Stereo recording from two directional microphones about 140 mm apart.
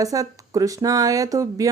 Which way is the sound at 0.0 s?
25° right (ahead or behind).